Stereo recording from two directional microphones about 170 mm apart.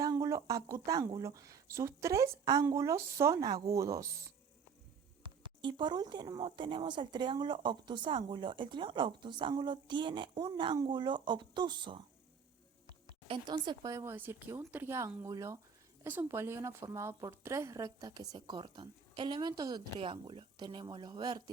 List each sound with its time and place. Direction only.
0.0 s speech: 20° right (ahead or behind)
13.2 s speech: 30° right (ahead or behind)